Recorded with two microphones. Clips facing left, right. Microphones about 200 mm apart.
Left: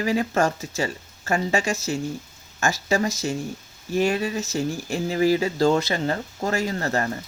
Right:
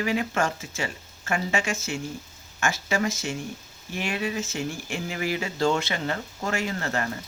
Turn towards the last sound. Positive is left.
turn(degrees=35)  # may be behind; listen again after turning